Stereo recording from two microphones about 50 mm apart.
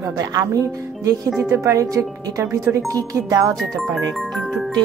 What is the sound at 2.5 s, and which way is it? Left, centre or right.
Speech, right.